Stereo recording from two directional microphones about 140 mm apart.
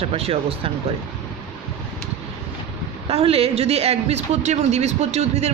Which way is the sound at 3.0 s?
45° right (ahead or behind).